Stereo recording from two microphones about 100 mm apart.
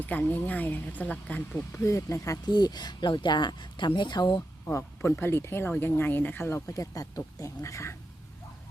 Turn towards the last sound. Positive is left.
turn(degrees=30)  # may be behind; listen again after turning